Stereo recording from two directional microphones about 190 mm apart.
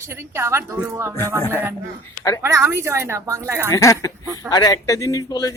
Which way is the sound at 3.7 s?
15° left (ahead or behind).